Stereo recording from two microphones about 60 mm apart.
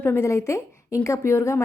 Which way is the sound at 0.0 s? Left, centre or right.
Left.